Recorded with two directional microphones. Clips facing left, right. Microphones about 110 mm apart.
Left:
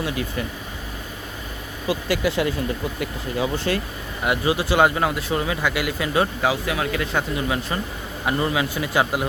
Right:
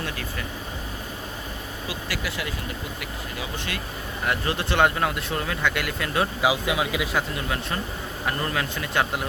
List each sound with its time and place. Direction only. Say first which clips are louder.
0.0 s a man's voice: left 6 dB; 20° left (ahead or behind)
1.9 s speech: left 11 dB; 25° left (ahead or behind)
4.3 s speech: left 5 dB; 5° left (ahead or behind)
6.4 s speech: left 1 dB; 15° right (ahead or behind)
7.1 s a man's voice: left 3 dB; centre (ahead or behind)